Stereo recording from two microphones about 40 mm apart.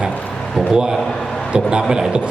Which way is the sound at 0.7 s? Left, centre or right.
Centre.